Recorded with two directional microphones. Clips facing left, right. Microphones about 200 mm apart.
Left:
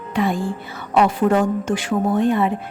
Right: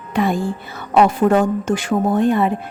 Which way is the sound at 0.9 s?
45° right (ahead or behind).